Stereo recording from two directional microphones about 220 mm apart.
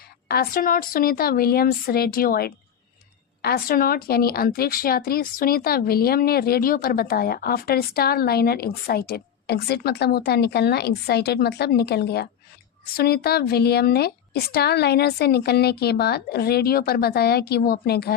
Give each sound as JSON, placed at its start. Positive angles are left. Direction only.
{"t": 0.3, "sound": "speech", "side_deg": 40}